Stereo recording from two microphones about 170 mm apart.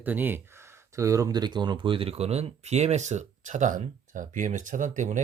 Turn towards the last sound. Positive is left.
turn(degrees=-50)  # may be behind; listen again after turning